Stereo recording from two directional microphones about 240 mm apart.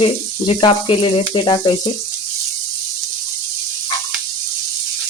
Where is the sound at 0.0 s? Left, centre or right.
Left.